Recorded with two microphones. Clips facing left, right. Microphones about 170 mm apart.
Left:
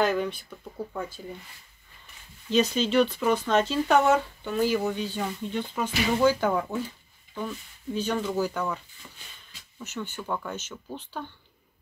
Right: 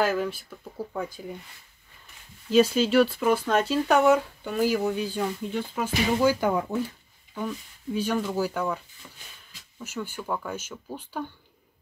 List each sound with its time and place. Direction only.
0.0 s speech: 5° right (ahead or behind)
2.5 s speech: 5° right (ahead or behind)